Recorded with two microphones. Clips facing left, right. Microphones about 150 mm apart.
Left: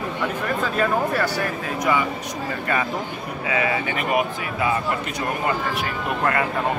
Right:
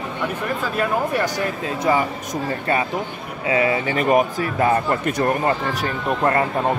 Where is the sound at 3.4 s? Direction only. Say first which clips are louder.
Right 4 dB; 30° right (ahead or behind).